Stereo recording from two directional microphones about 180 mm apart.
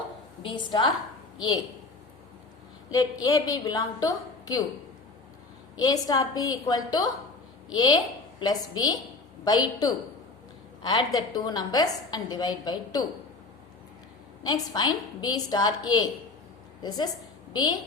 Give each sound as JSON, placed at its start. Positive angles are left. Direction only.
{"t": 0.4, "sound": "a woman's voice", "side_deg": 25}
{"t": 2.9, "sound": "a woman's voice", "side_deg": 20}
{"t": 5.7, "sound": "a woman's voice", "side_deg": 20}
{"t": 14.4, "sound": "a woman's voice", "side_deg": 20}
{"t": 17.5, "sound": "a woman's voice", "side_deg": 25}